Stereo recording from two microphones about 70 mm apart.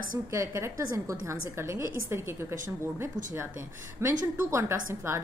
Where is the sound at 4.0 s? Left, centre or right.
Right.